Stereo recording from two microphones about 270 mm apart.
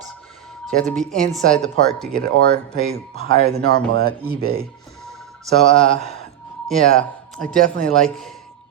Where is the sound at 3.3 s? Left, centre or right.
Right.